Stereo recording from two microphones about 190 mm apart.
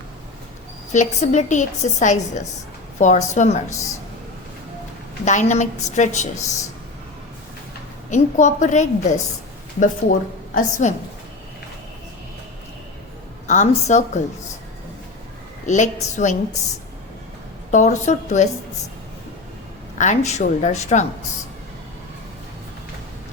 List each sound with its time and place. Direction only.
0.9 s a woman's voice: 40° left (ahead or behind)
5.2 s a woman's voice: 40° left (ahead or behind)
8.1 s a woman's voice: 40° left (ahead or behind)
13.5 s a woman's voice: 40° left (ahead or behind)
15.6 s a woman's voice: 40° left (ahead or behind)
17.7 s a woman's voice: 40° left (ahead or behind)
20.0 s a woman's voice: 40° left (ahead or behind)